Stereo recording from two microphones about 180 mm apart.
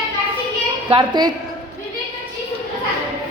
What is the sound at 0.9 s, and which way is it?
Speech, 25° right (ahead or behind).